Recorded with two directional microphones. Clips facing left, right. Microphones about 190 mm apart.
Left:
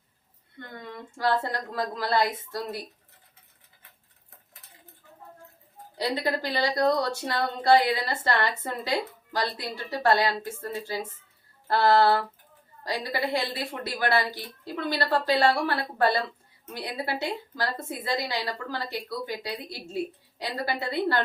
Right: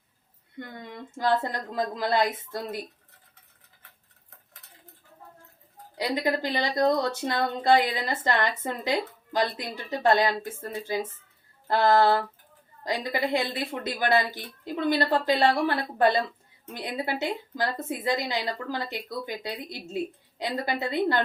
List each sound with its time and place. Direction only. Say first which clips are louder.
0.9 s speech: right 1 dB; 20° right (ahead or behind)
6.1 s speech: right 2 dB; 15° right (ahead or behind)
11.7 s a sound: even; 15° right (ahead or behind)
12.8 s speech: right 1 dB; 20° right (ahead or behind)